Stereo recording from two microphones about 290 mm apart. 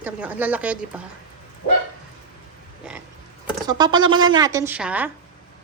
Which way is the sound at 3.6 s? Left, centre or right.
Centre.